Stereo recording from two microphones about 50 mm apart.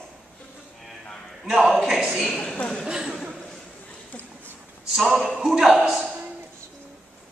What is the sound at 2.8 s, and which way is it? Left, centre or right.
Speech, centre.